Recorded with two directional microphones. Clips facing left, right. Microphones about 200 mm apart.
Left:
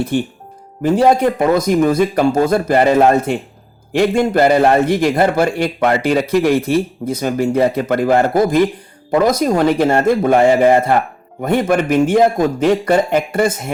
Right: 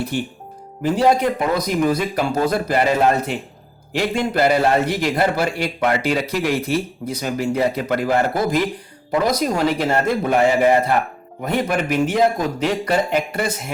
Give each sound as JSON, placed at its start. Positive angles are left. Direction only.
{"t": 0.8, "sound": "a man's voice", "side_deg": 50}